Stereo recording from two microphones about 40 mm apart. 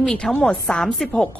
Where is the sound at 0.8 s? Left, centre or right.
Centre.